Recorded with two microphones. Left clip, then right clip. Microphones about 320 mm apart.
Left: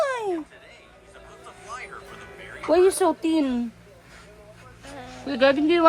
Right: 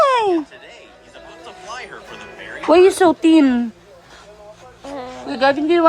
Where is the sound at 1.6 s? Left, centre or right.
Right.